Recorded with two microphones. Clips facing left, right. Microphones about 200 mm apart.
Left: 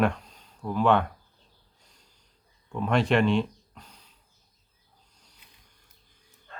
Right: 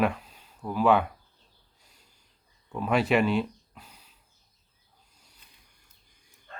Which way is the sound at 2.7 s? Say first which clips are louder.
Even; 5° right (ahead or behind).